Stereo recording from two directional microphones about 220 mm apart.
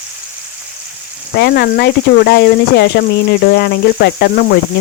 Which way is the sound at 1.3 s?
45° left (ahead or behind).